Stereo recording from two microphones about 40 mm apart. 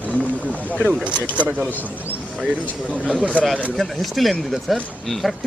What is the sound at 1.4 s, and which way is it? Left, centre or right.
Speech, right.